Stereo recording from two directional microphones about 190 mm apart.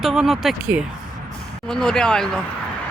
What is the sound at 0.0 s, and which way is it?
Speech, centre (ahead or behind).